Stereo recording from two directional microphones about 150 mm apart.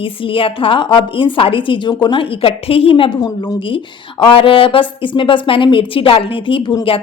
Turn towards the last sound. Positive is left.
turn(degrees=35)  # may be behind; listen again after turning